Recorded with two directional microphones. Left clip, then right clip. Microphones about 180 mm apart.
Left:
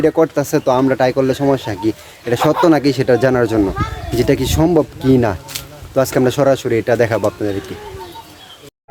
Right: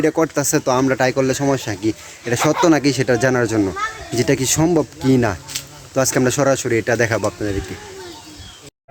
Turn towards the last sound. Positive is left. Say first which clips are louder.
# left 3 dB
turn(degrees=0)  # may be behind; listen again after turning